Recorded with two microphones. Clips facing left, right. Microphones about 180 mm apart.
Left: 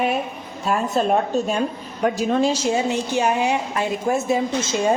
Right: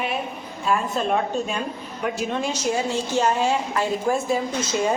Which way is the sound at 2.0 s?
40° left (ahead or behind).